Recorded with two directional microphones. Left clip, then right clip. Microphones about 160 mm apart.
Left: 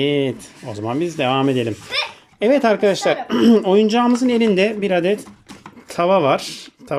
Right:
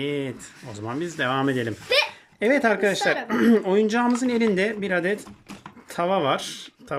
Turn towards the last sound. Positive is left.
turn(degrees=10)  # may be behind; listen again after turning